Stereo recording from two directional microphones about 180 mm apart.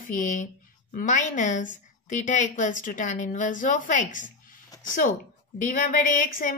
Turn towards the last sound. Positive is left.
turn(degrees=45)  # may be behind; listen again after turning